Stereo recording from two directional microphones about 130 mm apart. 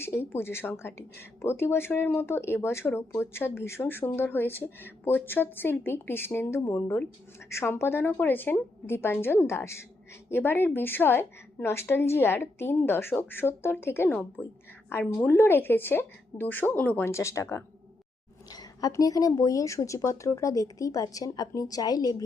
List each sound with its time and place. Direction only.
0.0 s speech: 20° left (ahead or behind)